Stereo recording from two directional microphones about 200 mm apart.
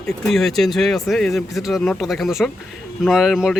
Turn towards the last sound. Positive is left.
turn(degrees=0)  # may be behind; listen again after turning